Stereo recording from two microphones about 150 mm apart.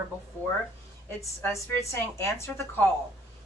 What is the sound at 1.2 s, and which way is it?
Speech, 20° left (ahead or behind).